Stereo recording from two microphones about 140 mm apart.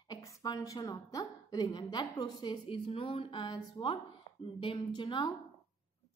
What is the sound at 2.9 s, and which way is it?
A woman's voice, 40° left (ahead or behind).